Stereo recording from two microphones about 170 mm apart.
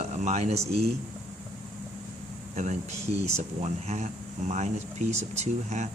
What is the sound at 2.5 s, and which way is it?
Speech, 45° right (ahead or behind).